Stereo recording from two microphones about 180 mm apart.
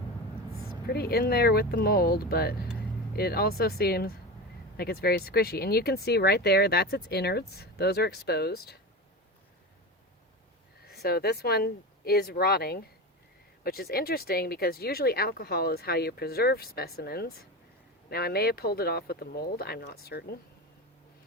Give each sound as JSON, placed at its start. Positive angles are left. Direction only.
{"t": 0.9, "sound": "speech", "side_deg": 60}
{"t": 10.8, "sound": "speech", "side_deg": 60}